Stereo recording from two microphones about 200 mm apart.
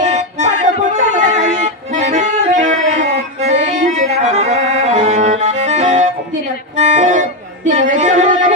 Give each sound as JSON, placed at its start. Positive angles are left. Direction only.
{"t": 0.0, "sound": "music", "side_deg": -35}